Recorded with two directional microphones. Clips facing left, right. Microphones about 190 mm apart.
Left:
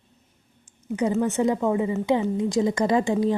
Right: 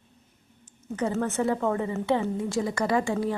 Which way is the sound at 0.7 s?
10° left (ahead or behind).